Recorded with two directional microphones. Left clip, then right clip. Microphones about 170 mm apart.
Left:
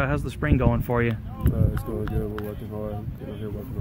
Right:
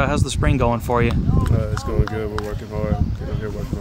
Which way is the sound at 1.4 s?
45° right (ahead or behind).